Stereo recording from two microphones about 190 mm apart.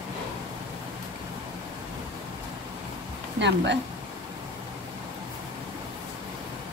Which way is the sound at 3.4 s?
65° right (ahead or behind).